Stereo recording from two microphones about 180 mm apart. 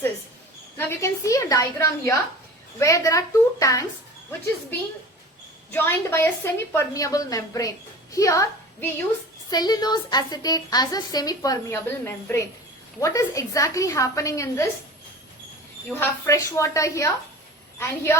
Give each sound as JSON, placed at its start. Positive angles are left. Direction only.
{"t": 0.8, "sound": "a woman's voice", "side_deg": 15}
{"t": 5.7, "sound": "a woman's voice", "side_deg": 10}
{"t": 9.5, "sound": "a woman's voice", "side_deg": 20}
{"t": 15.9, "sound": "a woman's voice", "side_deg": 15}